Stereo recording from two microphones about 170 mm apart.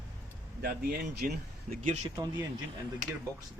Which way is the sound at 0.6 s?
65° right (ahead or behind).